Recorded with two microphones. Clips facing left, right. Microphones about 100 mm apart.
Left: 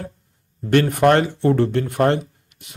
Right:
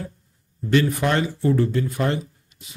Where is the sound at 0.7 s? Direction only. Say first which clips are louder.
Left 5 dB; 60° left (ahead or behind).